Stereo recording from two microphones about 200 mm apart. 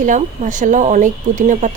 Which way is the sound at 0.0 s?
40° right (ahead or behind).